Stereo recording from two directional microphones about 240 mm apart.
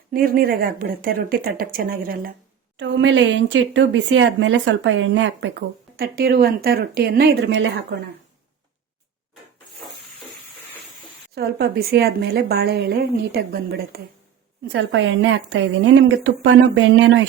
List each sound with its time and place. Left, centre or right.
0.1 s speech: right
11.3 s speech: right